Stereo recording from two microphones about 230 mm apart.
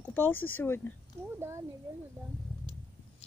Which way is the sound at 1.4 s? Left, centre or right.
Centre.